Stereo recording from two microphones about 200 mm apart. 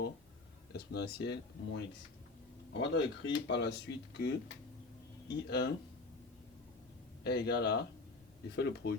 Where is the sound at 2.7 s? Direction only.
60° left (ahead or behind).